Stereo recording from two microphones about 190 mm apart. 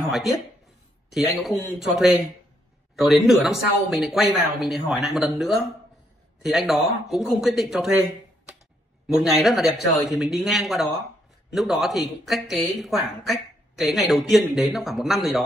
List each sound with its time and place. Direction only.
0.0 s speech: centre (ahead or behind)
9.0 s speech: 5° right (ahead or behind)